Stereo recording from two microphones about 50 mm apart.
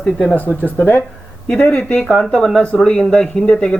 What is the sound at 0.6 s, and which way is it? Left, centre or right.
Speech, left.